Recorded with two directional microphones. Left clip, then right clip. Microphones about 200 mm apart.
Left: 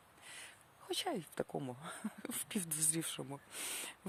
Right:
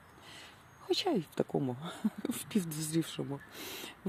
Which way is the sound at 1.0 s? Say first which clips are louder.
Right 7 dB; 20° left (ahead or behind).